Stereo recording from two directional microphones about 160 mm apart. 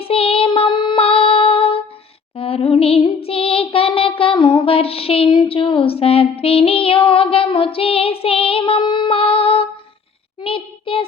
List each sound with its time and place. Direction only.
0.0 s child singing: 35° left (ahead or behind)
2.3 s a sound: 35° left (ahead or behind)
10.4 s child singing: 35° left (ahead or behind)